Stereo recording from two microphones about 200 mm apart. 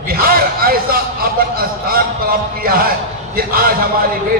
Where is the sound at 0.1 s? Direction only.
45° right (ahead or behind).